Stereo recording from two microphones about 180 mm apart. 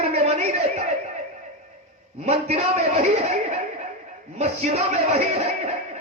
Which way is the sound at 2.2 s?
35° right (ahead or behind).